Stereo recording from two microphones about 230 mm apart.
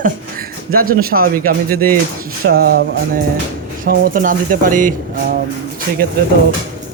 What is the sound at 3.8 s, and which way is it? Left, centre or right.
Speech, right.